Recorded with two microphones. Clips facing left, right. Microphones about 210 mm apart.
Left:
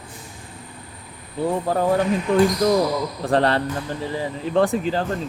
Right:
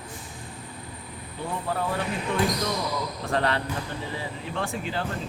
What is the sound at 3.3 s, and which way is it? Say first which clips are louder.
Speech: left 7 dB; 35° left (ahead or behind).